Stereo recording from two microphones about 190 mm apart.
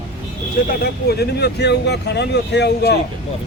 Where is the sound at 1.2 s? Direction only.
60° left (ahead or behind).